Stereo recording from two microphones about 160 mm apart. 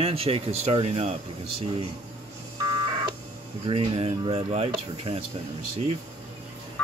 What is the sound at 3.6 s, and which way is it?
Speech, 35° right (ahead or behind).